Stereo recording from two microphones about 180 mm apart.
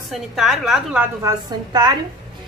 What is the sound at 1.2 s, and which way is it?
Speech, 20° right (ahead or behind).